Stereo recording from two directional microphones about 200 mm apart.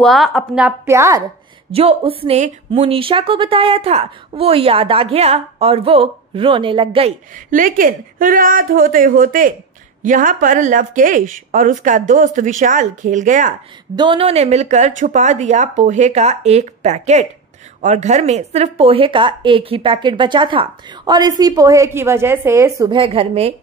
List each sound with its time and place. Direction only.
0.0 s a woman's voice: centre (ahead or behind)
1.7 s speech: 30° right (ahead or behind)
7.3 s speech: 45° right (ahead or behind)
13.9 s speech: 25° right (ahead or behind)
22.9 s speech: 30° right (ahead or behind)